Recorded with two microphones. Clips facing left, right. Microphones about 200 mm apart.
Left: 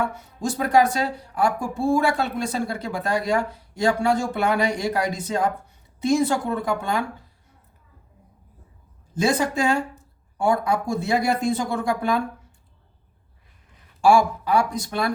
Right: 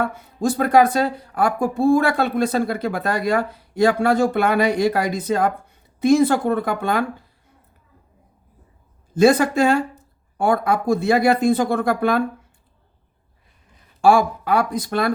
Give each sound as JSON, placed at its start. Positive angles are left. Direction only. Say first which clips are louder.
{"t": 0.0, "sound": "speech", "louder": "right 4 dB", "side_deg": -55}
{"t": 9.2, "sound": "speech", "louder": "right 7 dB", "side_deg": -60}
{"t": 14.0, "sound": "speech", "louder": "right 2 dB", "side_deg": -55}